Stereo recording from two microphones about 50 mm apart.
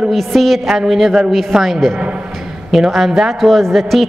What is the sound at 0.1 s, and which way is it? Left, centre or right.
A man's voice, centre.